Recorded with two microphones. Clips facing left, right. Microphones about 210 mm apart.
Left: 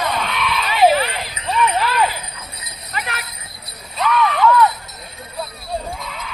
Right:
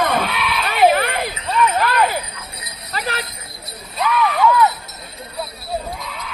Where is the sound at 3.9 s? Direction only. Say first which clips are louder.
Even; 5° right (ahead or behind).